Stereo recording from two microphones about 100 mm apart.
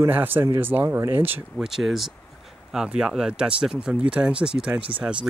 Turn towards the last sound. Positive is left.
turn(degrees=-10)  # may be behind; listen again after turning